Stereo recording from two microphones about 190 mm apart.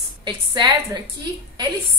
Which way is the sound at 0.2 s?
25° right (ahead or behind).